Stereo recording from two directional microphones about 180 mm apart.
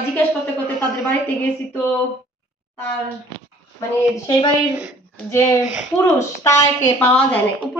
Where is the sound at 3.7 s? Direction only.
20° left (ahead or behind).